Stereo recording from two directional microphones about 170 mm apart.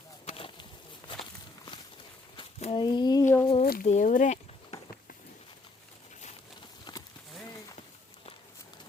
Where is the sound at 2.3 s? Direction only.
35° left (ahead or behind).